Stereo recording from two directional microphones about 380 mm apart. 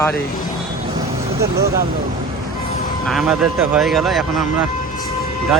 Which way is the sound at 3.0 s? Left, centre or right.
Centre.